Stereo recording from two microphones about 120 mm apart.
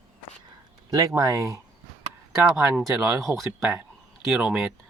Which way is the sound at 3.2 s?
Centre (ahead or behind).